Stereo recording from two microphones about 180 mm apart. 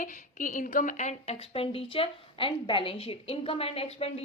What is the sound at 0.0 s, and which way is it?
A woman's voice, 45° left (ahead or behind).